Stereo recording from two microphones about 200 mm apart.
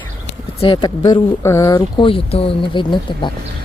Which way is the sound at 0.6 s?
25° left (ahead or behind).